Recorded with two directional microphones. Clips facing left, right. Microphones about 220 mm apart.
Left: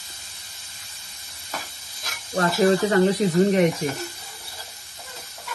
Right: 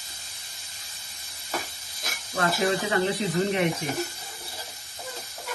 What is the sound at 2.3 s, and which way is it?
Speech, 40° left (ahead or behind).